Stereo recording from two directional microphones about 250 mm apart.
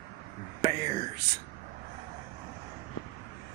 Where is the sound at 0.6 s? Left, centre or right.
Right.